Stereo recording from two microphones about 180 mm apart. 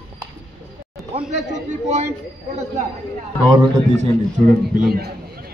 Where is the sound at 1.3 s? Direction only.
40° right (ahead or behind).